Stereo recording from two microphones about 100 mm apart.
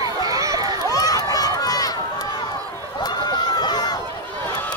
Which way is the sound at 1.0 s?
40° left (ahead or behind).